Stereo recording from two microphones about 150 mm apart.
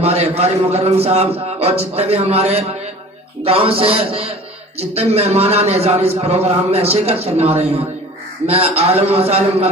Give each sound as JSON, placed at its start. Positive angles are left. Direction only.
{"t": 0.0, "sound": "a man's voice", "side_deg": -45}